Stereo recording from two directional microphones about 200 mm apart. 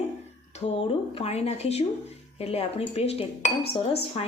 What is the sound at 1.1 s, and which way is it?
Speech, 30° left (ahead or behind).